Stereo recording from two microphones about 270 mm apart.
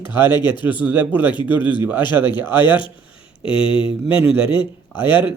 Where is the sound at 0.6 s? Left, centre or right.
Centre.